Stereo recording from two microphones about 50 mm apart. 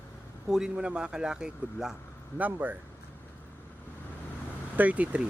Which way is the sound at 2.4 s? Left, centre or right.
Right.